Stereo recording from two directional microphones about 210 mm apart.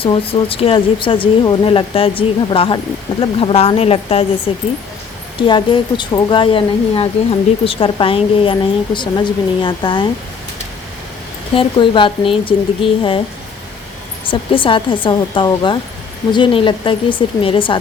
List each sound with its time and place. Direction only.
0.0 s speech: 25° left (ahead or behind)
11.5 s speech: 25° left (ahead or behind)
14.3 s speech: 25° left (ahead or behind)